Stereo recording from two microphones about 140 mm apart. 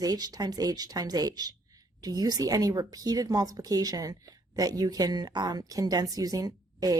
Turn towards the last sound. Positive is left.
turn(degrees=-25)  # may be behind; listen again after turning